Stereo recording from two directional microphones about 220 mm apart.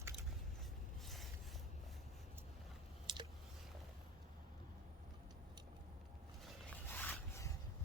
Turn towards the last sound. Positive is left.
turn(degrees=10)  # may be behind; listen again after turning